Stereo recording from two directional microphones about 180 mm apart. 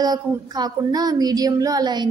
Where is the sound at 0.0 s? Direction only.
20° right (ahead or behind).